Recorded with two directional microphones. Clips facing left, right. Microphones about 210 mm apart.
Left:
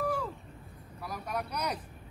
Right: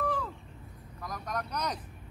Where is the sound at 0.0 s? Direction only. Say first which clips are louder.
Left 1 dB; 10° left (ahead or behind).